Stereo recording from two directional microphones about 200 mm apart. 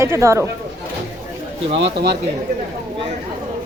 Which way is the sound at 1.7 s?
60° right (ahead or behind).